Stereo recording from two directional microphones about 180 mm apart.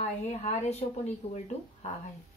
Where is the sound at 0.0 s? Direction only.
35° left (ahead or behind).